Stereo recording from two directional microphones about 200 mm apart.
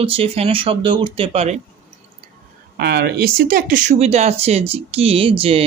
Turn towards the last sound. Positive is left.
turn(degrees=-25)  # may be behind; listen again after turning